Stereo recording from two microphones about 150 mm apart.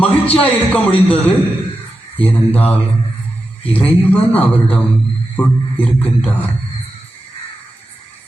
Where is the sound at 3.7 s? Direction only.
10° left (ahead or behind).